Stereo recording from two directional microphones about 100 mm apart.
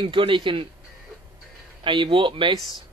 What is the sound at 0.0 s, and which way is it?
Speech, 55° right (ahead or behind).